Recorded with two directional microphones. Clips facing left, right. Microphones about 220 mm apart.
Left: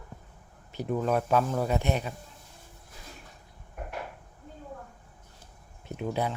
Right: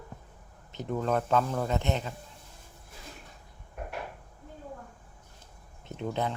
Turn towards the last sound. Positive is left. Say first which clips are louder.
# left 1 dB
turn(degrees=10)  # may be behind; listen again after turning